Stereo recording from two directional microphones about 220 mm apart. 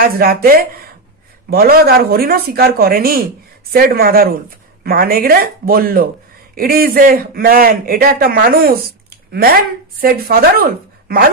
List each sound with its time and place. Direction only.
0.0 s a man's voice: 45° right (ahead or behind)